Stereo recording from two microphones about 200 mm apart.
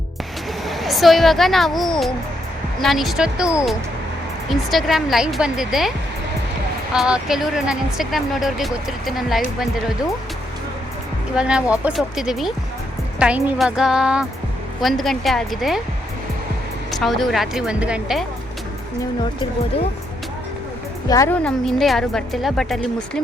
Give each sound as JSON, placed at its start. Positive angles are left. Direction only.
{"t": 0.7, "sound": "speech", "side_deg": 0}
{"t": 6.9, "sound": "speech", "side_deg": -5}
{"t": 11.3, "sound": "speech", "side_deg": -5}
{"t": 16.9, "sound": "speech", "side_deg": 0}
{"t": 19.2, "sound": "speech", "side_deg": 25}
{"t": 21.1, "sound": "speech", "side_deg": 10}